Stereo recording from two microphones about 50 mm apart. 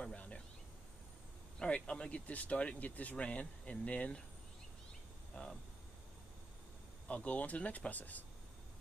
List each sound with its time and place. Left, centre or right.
0.0 s a sound: left
1.6 s speech: centre
5.4 s speech: left
7.1 s speech: left